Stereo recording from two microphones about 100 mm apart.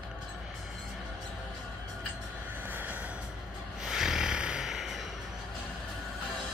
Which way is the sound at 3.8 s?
5° right (ahead or behind).